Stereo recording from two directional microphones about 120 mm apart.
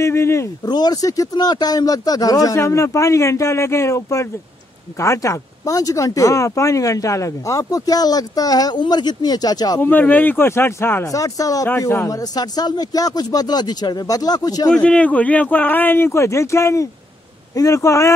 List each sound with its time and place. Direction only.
0.0 s speech: 25° left (ahead or behind)
0.7 s speech: 35° left (ahead or behind)
9.8 s speech: 15° left (ahead or behind); by 14.7 s 30° left (ahead or behind)
14.7 s speech: 10° left (ahead or behind); by 18.1 s 25° left (ahead or behind)